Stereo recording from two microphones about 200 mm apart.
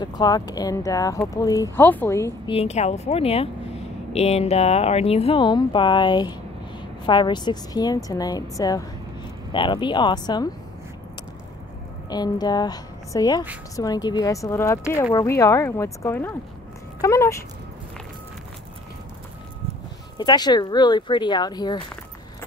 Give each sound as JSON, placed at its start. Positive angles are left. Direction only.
{"t": 0.0, "sound": "speech", "side_deg": 20}
{"t": 2.5, "sound": "speech", "side_deg": 30}
{"t": 12.1, "sound": "speech", "side_deg": 20}
{"t": 20.2, "sound": "speech", "side_deg": 20}